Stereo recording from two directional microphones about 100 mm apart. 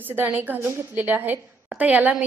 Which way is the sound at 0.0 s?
20° right (ahead or behind).